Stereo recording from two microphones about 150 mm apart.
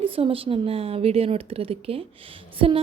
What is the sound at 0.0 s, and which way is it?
A woman's voice, 35° right (ahead or behind).